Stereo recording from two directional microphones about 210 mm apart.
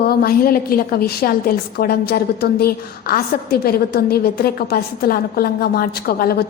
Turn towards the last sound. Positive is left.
turn(degrees=45)  # may be behind; listen again after turning